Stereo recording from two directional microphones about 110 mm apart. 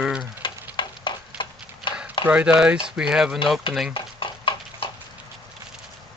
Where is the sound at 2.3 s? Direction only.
10° right (ahead or behind).